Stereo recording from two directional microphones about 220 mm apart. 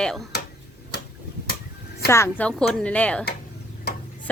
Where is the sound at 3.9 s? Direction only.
45° left (ahead or behind).